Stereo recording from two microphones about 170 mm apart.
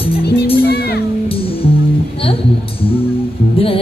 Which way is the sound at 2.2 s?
35° left (ahead or behind).